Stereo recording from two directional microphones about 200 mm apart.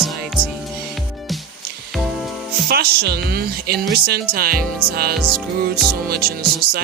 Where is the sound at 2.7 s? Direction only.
50° right (ahead or behind).